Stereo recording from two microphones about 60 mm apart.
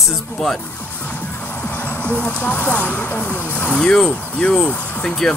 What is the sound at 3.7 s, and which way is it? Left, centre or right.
Speech, centre.